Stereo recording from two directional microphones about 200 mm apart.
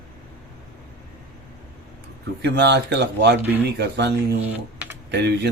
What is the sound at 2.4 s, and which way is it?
A man's voice, 60° right (ahead or behind).